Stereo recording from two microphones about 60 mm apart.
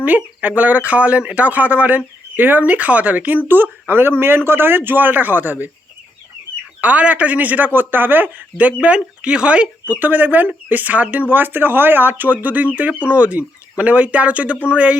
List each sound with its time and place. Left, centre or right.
0.0 s speech: right
6.8 s speech: right